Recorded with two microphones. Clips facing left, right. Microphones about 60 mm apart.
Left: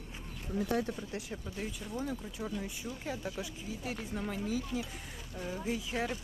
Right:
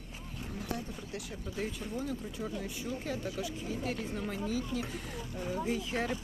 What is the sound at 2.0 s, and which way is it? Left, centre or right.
Speech, centre.